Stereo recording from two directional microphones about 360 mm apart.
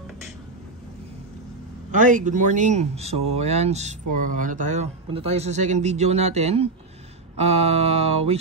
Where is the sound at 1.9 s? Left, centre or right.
Right.